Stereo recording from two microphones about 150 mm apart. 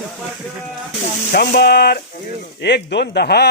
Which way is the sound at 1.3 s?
85° left.